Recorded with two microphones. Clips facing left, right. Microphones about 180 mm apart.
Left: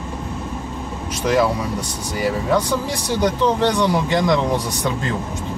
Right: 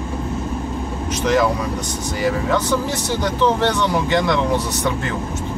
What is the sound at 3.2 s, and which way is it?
Speech, 15° left (ahead or behind).